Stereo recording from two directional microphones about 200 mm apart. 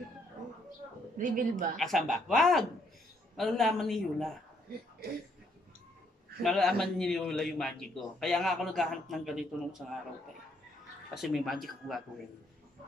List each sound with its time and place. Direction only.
1.1 s a woman's voice: 40° right (ahead or behind)
1.8 s a man's voice: centre (ahead or behind)
5.0 s a sound: 50° right (ahead or behind)
6.4 s a man's voice: centre (ahead or behind)
11.1 s a man's voice: centre (ahead or behind)